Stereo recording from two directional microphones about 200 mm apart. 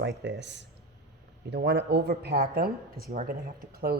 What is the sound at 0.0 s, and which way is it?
Speech, 55° right (ahead or behind).